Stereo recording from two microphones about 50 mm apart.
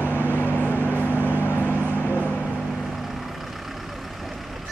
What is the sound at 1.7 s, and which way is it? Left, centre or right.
Vehicle, right.